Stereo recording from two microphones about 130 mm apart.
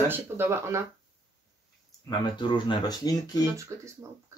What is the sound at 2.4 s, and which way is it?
Speech, 35° left (ahead or behind).